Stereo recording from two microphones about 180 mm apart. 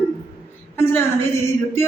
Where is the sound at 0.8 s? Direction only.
15° left (ahead or behind).